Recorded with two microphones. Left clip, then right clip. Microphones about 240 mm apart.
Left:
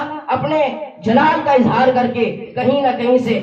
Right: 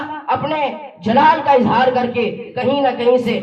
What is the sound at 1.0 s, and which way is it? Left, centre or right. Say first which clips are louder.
A man's voice: right 2 dB; right.